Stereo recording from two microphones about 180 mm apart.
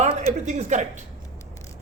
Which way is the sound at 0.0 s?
40° right (ahead or behind).